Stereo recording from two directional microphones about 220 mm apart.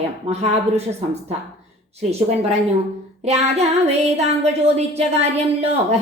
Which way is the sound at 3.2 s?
30° right (ahead or behind).